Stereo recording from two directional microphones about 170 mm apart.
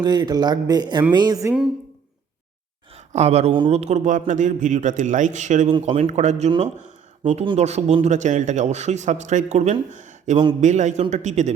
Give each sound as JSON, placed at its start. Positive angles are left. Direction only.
{"t": 0.0, "sound": "speech", "side_deg": -25}
{"t": 2.9, "sound": "a sound", "side_deg": -40}
{"t": 3.7, "sound": "speech", "side_deg": -40}